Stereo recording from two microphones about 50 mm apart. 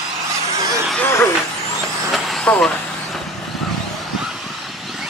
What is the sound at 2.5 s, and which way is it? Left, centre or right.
Speech, left.